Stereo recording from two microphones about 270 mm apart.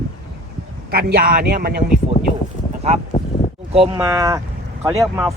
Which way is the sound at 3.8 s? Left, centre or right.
Centre.